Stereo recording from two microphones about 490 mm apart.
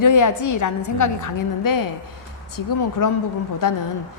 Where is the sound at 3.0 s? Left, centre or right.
Left.